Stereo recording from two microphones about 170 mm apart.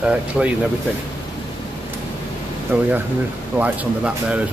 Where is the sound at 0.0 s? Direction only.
5° right (ahead or behind).